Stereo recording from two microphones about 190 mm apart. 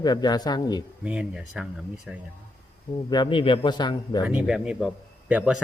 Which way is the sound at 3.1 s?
25° left (ahead or behind).